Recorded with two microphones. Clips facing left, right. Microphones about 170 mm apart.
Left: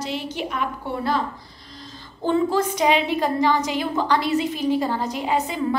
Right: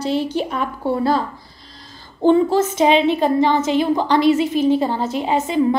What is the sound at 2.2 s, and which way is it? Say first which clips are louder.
A woman's voice: right 6 dB; 20° right (ahead or behind).